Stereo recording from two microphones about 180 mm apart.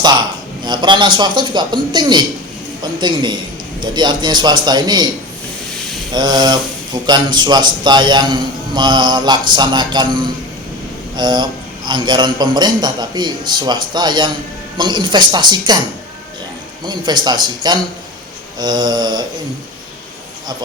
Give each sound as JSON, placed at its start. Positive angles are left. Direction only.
{"t": 0.6, "sound": "a man's voice", "side_deg": -25}
{"t": 6.1, "sound": "a man's voice", "side_deg": -25}
{"t": 16.8, "sound": "a man's voice", "side_deg": -25}